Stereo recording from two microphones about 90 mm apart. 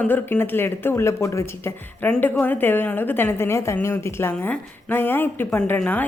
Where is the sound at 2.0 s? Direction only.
15° left (ahead or behind).